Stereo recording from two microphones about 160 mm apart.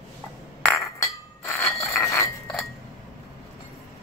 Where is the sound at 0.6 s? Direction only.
15° left (ahead or behind).